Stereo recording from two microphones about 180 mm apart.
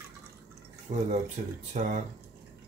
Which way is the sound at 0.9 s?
35° right (ahead or behind).